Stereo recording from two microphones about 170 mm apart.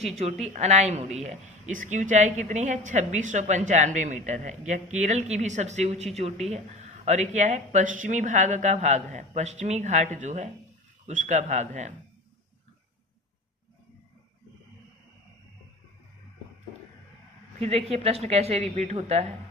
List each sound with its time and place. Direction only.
0.4 s speech: 40° right (ahead or behind)
17.6 s a woman's voice: 35° right (ahead or behind)